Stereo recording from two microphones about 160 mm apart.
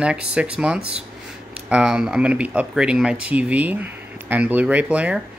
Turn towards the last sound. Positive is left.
turn(degrees=-10)  # may be behind; listen again after turning